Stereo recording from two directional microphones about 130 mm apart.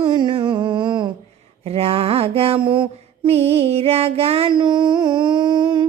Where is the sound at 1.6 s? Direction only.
50° right (ahead or behind).